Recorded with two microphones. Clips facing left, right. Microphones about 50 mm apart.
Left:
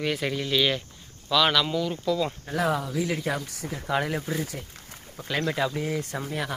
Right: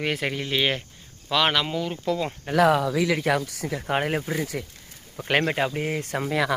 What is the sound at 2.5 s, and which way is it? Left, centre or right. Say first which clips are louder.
Speech: right 10 dB; right.